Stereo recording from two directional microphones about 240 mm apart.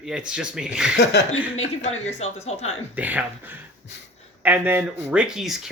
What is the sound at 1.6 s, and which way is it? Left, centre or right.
Speech, left.